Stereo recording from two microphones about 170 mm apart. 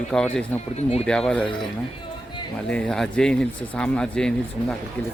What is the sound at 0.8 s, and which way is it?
Speech, 40° left (ahead or behind).